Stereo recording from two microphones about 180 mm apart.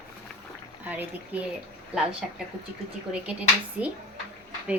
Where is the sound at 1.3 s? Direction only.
10° right (ahead or behind).